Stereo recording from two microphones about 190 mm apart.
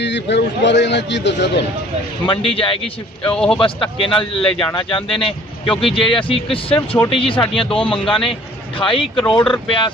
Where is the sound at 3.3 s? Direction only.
5° left (ahead or behind).